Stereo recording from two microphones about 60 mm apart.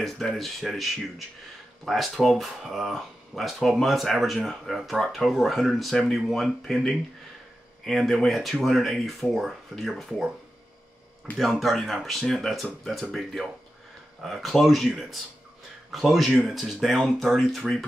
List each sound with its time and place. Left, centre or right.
0.0 s speech: centre
11.3 s speech: left
11.6 s speech: centre